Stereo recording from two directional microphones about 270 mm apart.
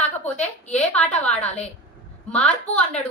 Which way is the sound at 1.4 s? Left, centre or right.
Left.